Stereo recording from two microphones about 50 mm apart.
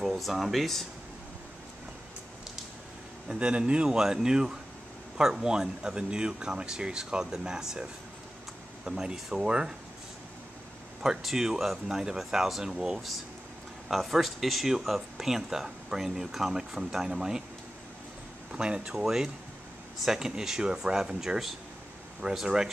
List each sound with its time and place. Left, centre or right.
0.0 s speech: centre
3.3 s speech: right
8.8 s speech: centre
11.0 s speech: centre
18.5 s speech: centre